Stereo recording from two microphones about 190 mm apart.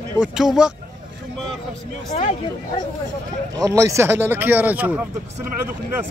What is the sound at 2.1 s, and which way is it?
Speech, 35° left (ahead or behind).